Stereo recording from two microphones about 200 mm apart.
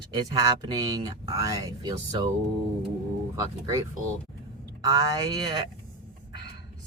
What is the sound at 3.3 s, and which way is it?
Speech, 15° right (ahead or behind).